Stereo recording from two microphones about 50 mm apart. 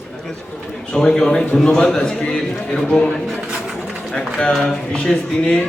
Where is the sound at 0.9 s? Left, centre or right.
Centre.